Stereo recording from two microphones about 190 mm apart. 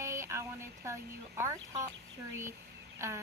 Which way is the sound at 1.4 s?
15° right (ahead or behind).